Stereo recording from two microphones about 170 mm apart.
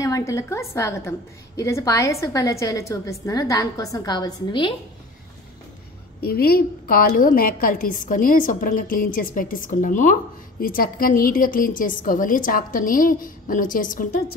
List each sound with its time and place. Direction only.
0.0 s a woman's voice: 20° left (ahead or behind)
6.2 s a woman's voice: 65° left (ahead or behind)